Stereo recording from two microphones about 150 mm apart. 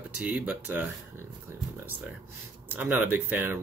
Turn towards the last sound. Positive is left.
turn(degrees=-15)  # may be behind; listen again after turning